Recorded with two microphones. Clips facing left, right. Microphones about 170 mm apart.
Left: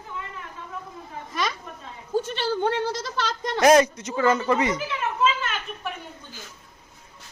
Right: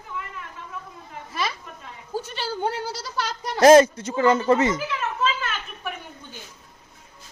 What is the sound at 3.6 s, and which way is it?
Speech, 25° right (ahead or behind).